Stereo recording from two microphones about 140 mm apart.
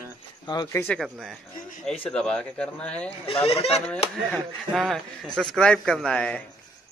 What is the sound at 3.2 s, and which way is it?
Speech, 40° left (ahead or behind).